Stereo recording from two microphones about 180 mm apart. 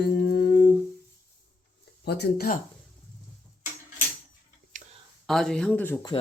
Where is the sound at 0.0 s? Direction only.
60° left (ahead or behind).